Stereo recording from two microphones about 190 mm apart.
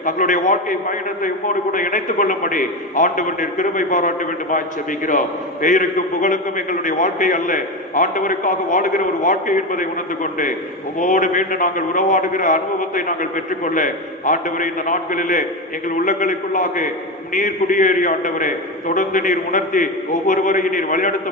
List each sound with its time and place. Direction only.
0.0 s a man's voice: 45° left (ahead or behind)
5.6 s a man's voice: 45° left (ahead or behind)
11.0 s a man's voice: 45° left (ahead or behind)